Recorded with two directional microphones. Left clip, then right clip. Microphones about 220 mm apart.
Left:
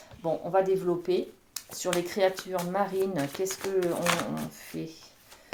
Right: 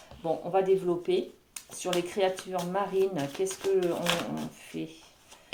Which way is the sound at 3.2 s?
25° left (ahead or behind).